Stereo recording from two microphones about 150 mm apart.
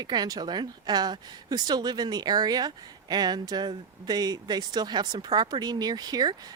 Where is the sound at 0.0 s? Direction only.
25° right (ahead or behind).